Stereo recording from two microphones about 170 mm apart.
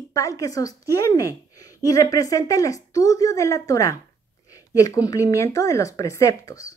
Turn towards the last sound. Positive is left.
turn(degrees=20)  # may be behind; listen again after turning